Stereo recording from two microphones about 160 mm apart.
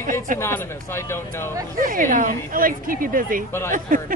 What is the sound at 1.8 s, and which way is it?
Speech, 60° right (ahead or behind).